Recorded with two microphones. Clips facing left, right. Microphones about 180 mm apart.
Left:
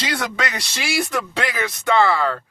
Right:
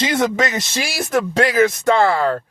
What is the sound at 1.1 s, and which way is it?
Speech, 45° right (ahead or behind).